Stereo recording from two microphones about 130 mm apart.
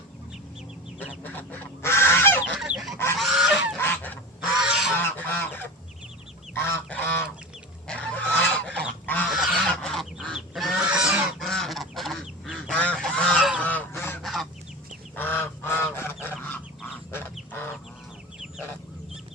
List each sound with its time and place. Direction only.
1.2 s goose: 10° left (ahead or behind)
2.6 s goose: 5° right (ahead or behind)
3.8 s goose: 15° left (ahead or behind)
4.4 s a sound: 5° right (ahead or behind)
4.9 s goose: 15° left (ahead or behind)
7.9 s pig: 10° left (ahead or behind)
8.5 s goose: 10° left (ahead or behind)
14.2 s fowl: centre (ahead or behind)
15.1 s goose: 15° left (ahead or behind)
16.4 s chicken: 15° left (ahead or behind)
17.5 s duck: 15° left (ahead or behind)